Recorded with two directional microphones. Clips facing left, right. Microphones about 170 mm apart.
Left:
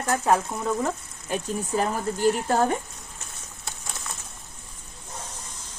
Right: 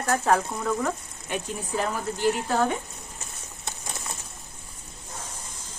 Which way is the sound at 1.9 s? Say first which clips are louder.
Left 1 dB; 45° left (ahead or behind).